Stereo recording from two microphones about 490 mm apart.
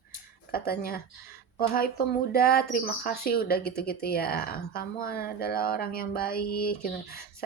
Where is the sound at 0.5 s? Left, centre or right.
Centre.